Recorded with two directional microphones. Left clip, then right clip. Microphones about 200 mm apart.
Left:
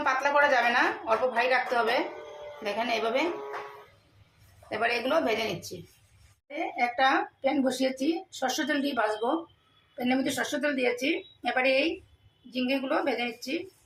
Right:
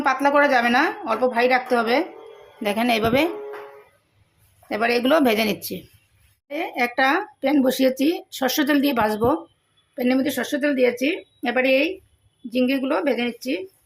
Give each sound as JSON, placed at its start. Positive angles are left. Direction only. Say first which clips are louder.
{"t": 0.0, "sound": "a woman's voice", "louder": "right 6 dB", "side_deg": -50}
{"t": 4.7, "sound": "a woman's voice", "louder": "right 7 dB", "side_deg": -50}